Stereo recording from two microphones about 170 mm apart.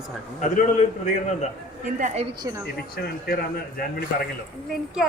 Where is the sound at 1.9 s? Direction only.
45° right (ahead or behind).